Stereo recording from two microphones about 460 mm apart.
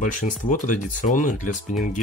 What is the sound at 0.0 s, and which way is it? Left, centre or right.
Speech, centre.